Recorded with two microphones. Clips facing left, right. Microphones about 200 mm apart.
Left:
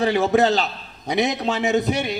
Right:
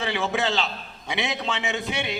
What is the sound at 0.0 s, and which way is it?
A man's voice, 40° left (ahead or behind).